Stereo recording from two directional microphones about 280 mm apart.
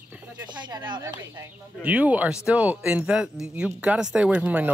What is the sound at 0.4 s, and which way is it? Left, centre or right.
Speech, centre.